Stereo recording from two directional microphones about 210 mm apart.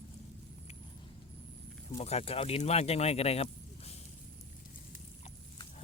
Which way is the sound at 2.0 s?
30° left (ahead or behind).